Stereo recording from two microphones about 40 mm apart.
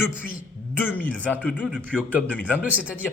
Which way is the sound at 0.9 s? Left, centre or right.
Left.